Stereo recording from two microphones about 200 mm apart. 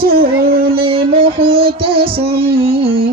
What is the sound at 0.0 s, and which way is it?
Music, 50° right (ahead or behind).